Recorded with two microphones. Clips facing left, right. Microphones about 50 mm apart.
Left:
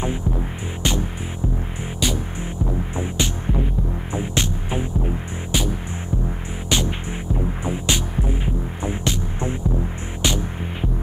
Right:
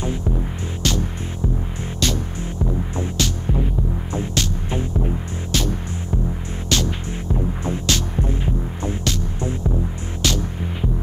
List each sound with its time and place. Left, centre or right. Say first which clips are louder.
0.8 s music: even; centre